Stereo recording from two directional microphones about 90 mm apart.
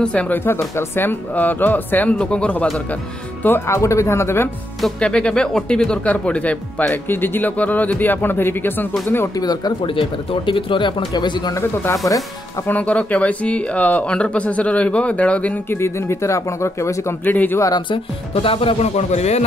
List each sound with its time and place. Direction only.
0.0 s speech: 15° left (ahead or behind)
0.5 s speech: 25° left (ahead or behind)
3.4 s speech: 30° left (ahead or behind)
4.8 s speech: 10° left (ahead or behind)
9.4 s speech: 50° left (ahead or behind)
9.8 s speech: 75° left (ahead or behind)
11.1 s speech: 50° left (ahead or behind)
11.5 s speech: 35° left (ahead or behind)
12.6 s speech: 15° left (ahead or behind)
15.8 s speech: 30° left (ahead or behind)
17.2 s speech: 20° left (ahead or behind)
17.6 s speech: 40° left (ahead or behind)
17.8 s speech: 80° left